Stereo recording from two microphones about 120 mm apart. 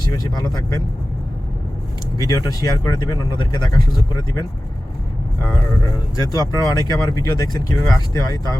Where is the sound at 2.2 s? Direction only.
30° left (ahead or behind).